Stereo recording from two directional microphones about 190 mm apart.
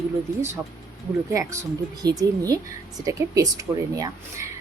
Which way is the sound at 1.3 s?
15° right (ahead or behind).